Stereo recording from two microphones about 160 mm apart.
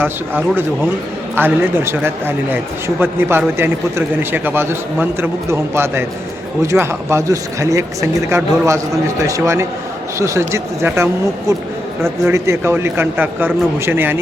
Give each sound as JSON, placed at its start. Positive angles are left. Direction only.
{"t": 0.0, "sound": "a man's voice", "side_deg": -10}